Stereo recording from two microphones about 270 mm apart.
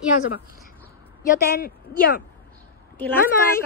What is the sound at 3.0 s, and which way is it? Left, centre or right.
Speech, centre.